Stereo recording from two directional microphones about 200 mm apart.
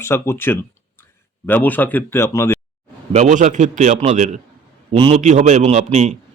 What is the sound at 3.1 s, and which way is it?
A man's voice, 40° right (ahead or behind).